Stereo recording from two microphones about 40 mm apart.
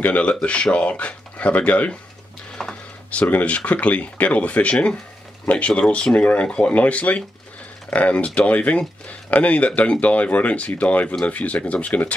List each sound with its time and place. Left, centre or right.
0.0 s speech: left
2.6 s a sound: centre
3.1 s speech: left
6.4 s speech: left